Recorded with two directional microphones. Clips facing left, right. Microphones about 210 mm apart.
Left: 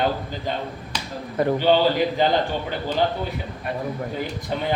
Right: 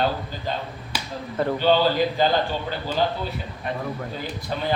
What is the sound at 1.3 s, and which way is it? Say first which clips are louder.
Speech: left 2 dB; 15° left (ahead or behind).